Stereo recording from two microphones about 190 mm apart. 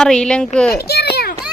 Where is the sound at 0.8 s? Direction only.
60° left (ahead or behind).